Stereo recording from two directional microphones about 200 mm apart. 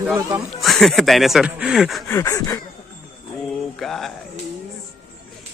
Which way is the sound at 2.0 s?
15° left (ahead or behind).